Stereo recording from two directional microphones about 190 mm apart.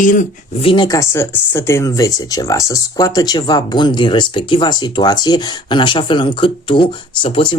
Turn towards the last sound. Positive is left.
turn(degrees=25)  # may be behind; listen again after turning